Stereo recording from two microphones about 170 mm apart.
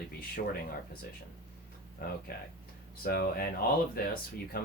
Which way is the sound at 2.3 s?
65° left (ahead or behind).